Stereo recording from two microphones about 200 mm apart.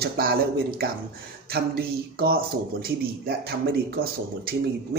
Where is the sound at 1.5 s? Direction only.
50° right (ahead or behind).